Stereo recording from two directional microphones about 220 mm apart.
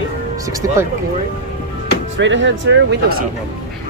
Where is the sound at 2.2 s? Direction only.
55° right (ahead or behind).